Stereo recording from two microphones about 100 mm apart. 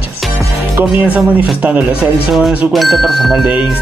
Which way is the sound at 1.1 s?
15° right (ahead or behind).